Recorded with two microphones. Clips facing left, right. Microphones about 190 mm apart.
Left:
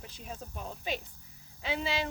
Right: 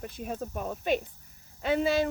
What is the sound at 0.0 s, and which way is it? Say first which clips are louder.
A woman's voice: right 9 dB; 55° right (ahead or behind).